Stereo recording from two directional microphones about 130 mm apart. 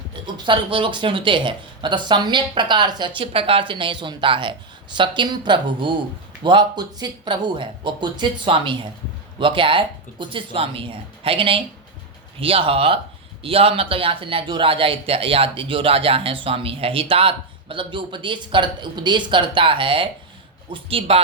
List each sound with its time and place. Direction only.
0.1 s speech: 35° right (ahead or behind)